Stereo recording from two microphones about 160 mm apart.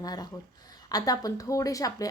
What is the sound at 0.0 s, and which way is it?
A woman's voice, 25° left (ahead or behind).